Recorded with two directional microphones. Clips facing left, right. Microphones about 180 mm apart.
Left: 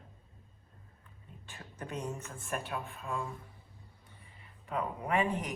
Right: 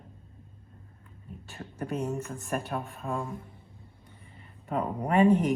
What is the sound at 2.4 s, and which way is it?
Speech, 40° right (ahead or behind).